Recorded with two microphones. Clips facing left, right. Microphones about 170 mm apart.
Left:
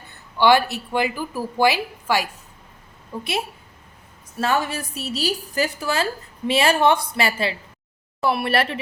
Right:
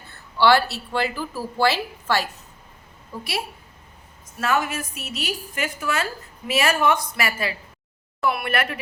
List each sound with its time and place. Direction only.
0.1 s a woman's voice: 15° left (ahead or behind)